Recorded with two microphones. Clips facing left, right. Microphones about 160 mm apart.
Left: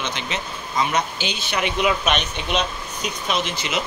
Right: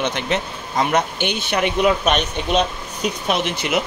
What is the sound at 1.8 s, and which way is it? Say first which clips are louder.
Speech: right 4 dB; 40° right (ahead or behind).